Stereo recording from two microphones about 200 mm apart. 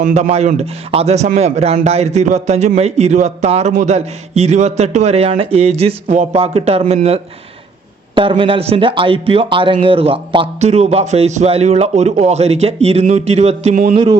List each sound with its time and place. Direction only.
0.0 s speech: 35° right (ahead or behind)
13.9 s speech: 20° right (ahead or behind)